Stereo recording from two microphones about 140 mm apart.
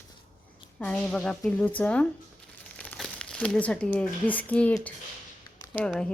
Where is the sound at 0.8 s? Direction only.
10° left (ahead or behind).